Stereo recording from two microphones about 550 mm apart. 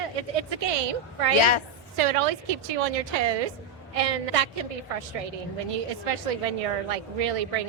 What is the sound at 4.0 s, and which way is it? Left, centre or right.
Speech, right.